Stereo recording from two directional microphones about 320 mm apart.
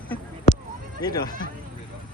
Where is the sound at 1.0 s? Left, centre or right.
Centre.